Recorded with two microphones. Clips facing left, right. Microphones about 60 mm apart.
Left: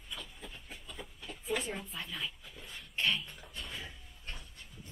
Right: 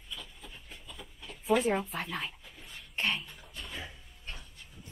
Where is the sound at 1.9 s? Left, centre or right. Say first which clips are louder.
Right 5 dB; right.